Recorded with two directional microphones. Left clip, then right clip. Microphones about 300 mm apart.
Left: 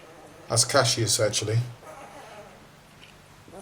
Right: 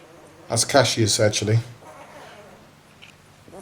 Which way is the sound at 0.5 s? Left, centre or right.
Centre.